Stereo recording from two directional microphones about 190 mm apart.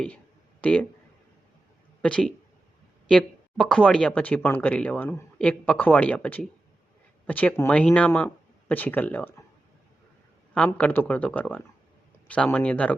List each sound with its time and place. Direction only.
0.6 s speech: 5° left (ahead or behind)
2.0 s speech: 5° left (ahead or behind)
10.5 s speech: 5° left (ahead or behind)